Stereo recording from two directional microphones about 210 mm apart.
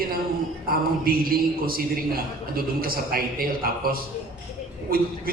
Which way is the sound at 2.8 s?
45° right (ahead or behind).